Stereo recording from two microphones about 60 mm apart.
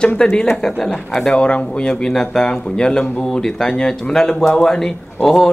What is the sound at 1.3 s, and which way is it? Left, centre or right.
A man's voice, centre.